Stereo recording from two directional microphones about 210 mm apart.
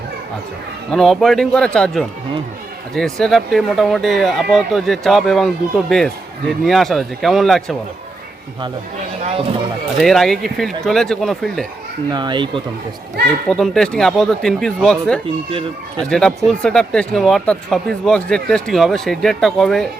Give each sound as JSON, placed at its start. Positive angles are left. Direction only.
{"t": 0.9, "sound": "speech", "side_deg": 0}
{"t": 9.2, "sound": "speech", "side_deg": -25}
{"t": 10.0, "sound": "speech", "side_deg": 0}
{"t": 12.1, "sound": "speech", "side_deg": -20}
{"t": 13.5, "sound": "speech", "side_deg": 5}